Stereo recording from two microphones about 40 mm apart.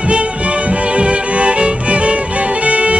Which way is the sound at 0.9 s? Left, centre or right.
Right.